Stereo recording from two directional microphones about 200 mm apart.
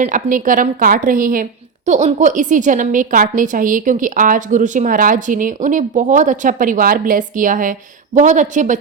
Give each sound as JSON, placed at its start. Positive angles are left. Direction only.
{"t": 0.0, "sound": "a woman's voice", "side_deg": -40}